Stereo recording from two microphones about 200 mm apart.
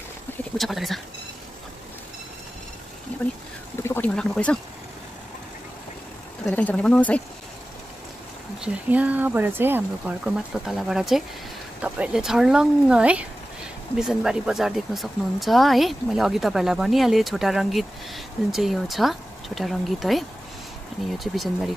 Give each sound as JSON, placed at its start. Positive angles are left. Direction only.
{"t": 0.6, "sound": "speech", "side_deg": 0}
{"t": 3.8, "sound": "speech", "side_deg": 10}
{"t": 6.4, "sound": "speech", "side_deg": 5}
{"t": 8.5, "sound": "speech", "side_deg": -5}
{"t": 21.3, "sound": "speech", "side_deg": 0}